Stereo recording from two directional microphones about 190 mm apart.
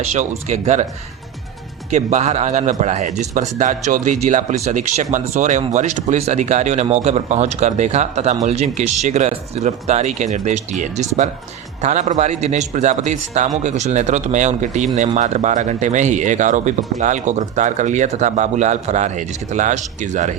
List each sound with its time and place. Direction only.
0.1 s speech: 35° right (ahead or behind)
1.9 s speech: 35° right (ahead or behind)